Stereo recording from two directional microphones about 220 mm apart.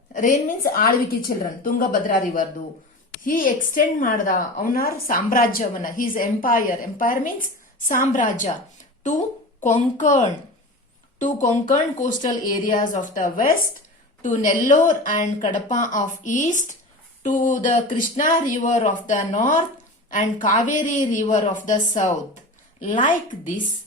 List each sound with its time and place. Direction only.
0.1 s a woman's voice: 35° left (ahead or behind)